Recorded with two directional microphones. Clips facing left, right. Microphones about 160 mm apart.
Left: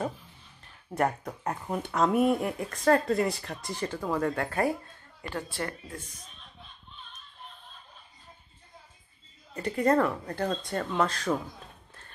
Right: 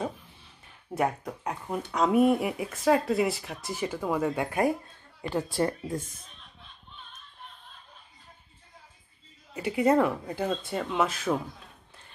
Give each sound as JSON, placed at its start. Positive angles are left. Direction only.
{"t": 0.9, "sound": "speech", "side_deg": 0}
{"t": 9.5, "sound": "speech", "side_deg": -10}